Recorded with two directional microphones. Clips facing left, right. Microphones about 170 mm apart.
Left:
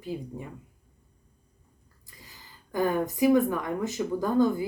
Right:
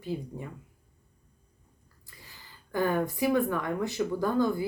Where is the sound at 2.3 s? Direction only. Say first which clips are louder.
Even; 15° left (ahead or behind).